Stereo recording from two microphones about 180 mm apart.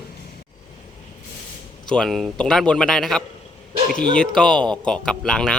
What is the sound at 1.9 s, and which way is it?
A man's voice, centre (ahead or behind).